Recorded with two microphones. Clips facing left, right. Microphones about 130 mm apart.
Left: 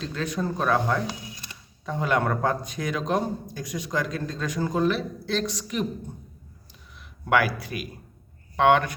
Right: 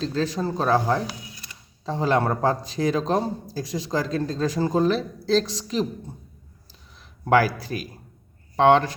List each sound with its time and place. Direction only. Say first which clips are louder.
0.0 s speech: right 4 dB; 35° right (ahead or behind)
7.3 s speech: right 4 dB; 35° right (ahead or behind)